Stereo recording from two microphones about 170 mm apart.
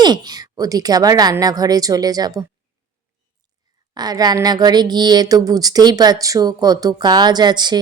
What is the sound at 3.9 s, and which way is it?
Speech, 25° right (ahead or behind).